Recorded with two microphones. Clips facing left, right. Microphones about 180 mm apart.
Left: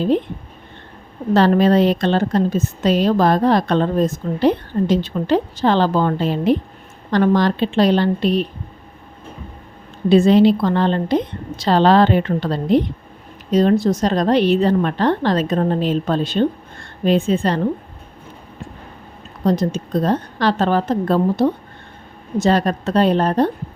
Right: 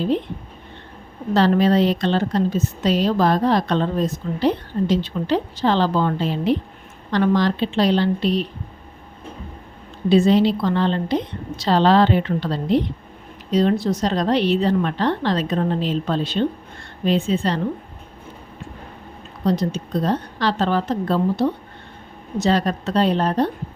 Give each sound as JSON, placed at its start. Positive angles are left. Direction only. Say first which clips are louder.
{"t": 1.3, "sound": "a woman's voice", "louder": "left 3 dB", "side_deg": 50}
{"t": 10.1, "sound": "a woman's voice", "louder": "left 4 dB", "side_deg": 55}
{"t": 19.5, "sound": "a woman's voice", "louder": "left 3 dB", "side_deg": 50}